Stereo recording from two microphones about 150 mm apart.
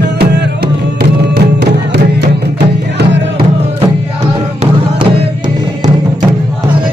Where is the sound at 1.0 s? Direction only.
90° right.